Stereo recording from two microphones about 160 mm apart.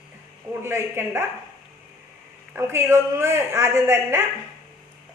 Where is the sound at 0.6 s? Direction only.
15° right (ahead or behind).